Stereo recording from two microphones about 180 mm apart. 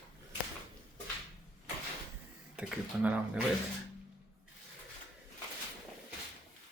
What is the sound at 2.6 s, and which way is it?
Speech, 5° right (ahead or behind).